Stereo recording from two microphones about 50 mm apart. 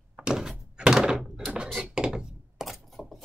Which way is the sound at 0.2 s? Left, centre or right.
Centre.